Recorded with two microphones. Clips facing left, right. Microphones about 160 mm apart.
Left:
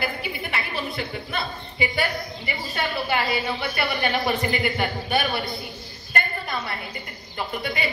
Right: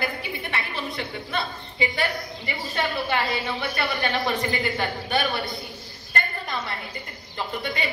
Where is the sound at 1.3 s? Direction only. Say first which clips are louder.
Right 1 dB; 15° left (ahead or behind).